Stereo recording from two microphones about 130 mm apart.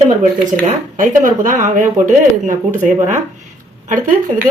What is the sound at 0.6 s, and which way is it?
Speech, 90° right.